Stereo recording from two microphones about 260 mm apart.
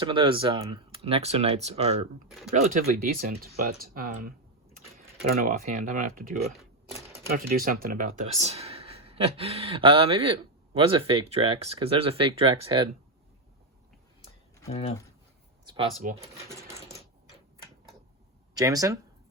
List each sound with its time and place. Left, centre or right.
0.0 s speech: centre
14.7 s speech: left
16.0 s speech: right
18.5 s speech: centre